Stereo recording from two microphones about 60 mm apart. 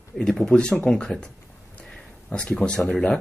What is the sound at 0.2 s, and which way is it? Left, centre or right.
A man's voice, centre.